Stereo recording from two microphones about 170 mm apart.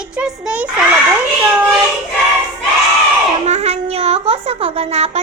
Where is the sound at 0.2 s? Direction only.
5° right (ahead or behind).